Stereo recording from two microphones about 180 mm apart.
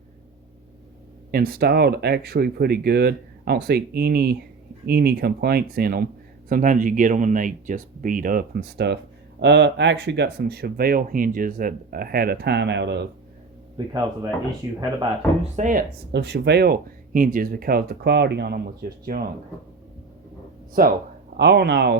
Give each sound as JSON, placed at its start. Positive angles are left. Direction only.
{"t": 1.3, "sound": "speech", "side_deg": -55}
{"t": 13.7, "sound": "speech", "side_deg": -20}
{"t": 15.5, "sound": "speech", "side_deg": -45}
{"t": 16.1, "sound": "speech", "side_deg": -70}
{"t": 19.1, "sound": "speech", "side_deg": -45}
{"t": 20.8, "sound": "speech", "side_deg": -55}
{"t": 21.3, "sound": "speech", "side_deg": -70}